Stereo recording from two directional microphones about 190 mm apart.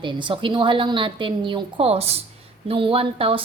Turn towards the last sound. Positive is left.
turn(degrees=-30)  # may be behind; listen again after turning